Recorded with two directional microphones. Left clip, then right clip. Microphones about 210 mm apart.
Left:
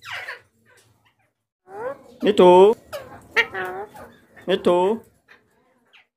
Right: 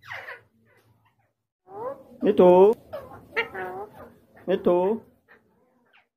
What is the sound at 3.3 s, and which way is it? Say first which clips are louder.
Chicken: left 7 dB; 20° left (ahead or behind).